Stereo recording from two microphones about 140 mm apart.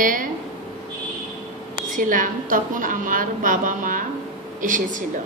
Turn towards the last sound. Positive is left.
turn(degrees=-70)  # may be behind; listen again after turning